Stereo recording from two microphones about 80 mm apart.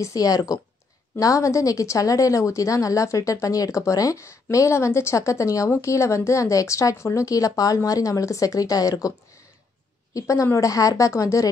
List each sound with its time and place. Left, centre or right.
0.0 s a woman's voice: left
10.1 s a woman's voice: left